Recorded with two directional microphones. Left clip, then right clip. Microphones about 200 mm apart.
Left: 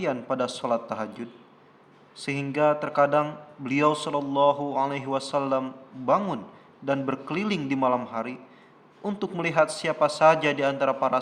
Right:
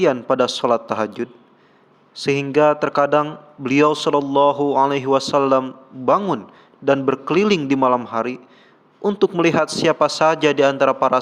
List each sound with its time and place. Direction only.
0.0 s a man's voice: 40° right (ahead or behind)